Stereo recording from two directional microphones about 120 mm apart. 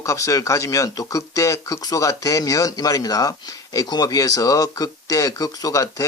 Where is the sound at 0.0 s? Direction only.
25° left (ahead or behind).